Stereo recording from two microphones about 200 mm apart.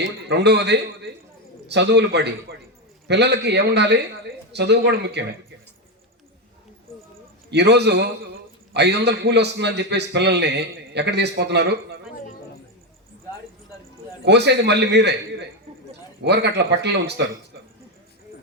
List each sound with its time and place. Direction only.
0.3 s a man's voice: 55° right (ahead or behind)
7.5 s a man's voice: 55° right (ahead or behind)
14.3 s a man's voice: 55° right (ahead or behind)